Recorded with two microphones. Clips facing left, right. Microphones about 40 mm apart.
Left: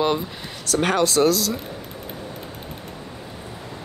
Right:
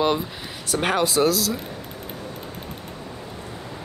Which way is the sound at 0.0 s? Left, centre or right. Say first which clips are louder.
Even; centre.